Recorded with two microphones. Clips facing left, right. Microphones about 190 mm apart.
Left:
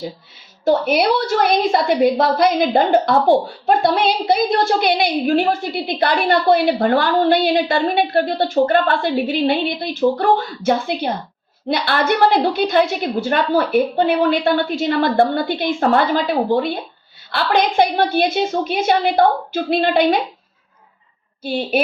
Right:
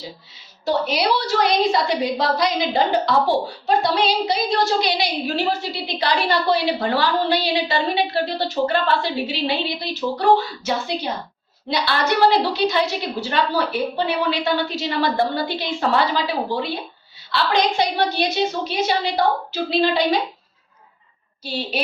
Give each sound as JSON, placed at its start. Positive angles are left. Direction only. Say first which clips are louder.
{"t": 0.6, "sound": "a woman's voice", "louder": "left 5 dB", "side_deg": 50}
{"t": 21.4, "sound": "a woman's voice", "louder": "left 7 dB", "side_deg": 50}